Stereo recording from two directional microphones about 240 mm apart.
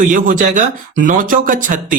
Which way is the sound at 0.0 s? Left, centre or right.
Right.